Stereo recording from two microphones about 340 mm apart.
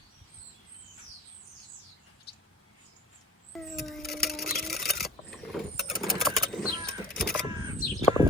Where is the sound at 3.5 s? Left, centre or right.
Centre.